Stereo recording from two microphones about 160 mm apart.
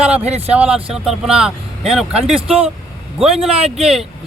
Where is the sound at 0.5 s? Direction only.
5° right (ahead or behind).